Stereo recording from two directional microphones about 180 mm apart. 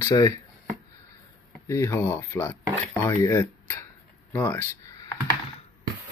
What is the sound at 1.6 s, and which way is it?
Speech, 15° left (ahead or behind).